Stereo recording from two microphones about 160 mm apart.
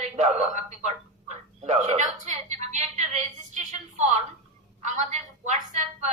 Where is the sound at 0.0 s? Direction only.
45° right (ahead or behind).